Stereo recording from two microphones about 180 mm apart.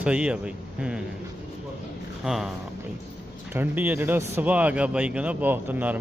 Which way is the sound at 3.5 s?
10° right (ahead or behind).